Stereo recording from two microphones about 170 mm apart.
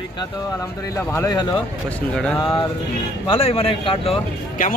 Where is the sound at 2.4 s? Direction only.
30° left (ahead or behind).